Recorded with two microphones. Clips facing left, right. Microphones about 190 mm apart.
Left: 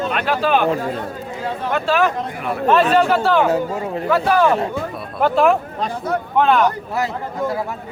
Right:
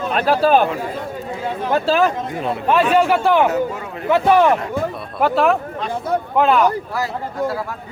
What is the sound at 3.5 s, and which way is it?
Speech, 30° left (ahead or behind).